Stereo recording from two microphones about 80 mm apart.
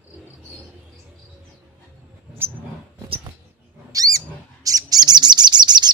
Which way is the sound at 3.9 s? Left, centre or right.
Right.